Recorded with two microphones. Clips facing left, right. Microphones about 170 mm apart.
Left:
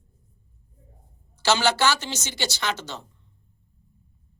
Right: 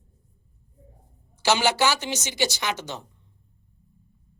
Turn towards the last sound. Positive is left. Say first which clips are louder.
# even
turn(degrees=-15)  # may be behind; listen again after turning